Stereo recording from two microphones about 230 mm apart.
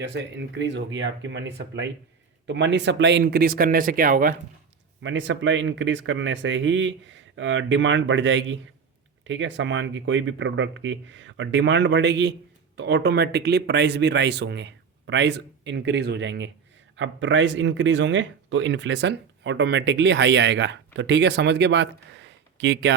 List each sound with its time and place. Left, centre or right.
0.0 s speech: right
5.0 s speech: right